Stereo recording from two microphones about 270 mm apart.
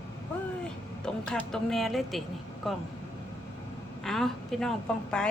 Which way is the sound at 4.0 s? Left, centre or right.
Centre.